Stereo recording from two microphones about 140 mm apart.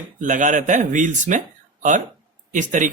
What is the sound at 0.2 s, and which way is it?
Speech, 65° right (ahead or behind).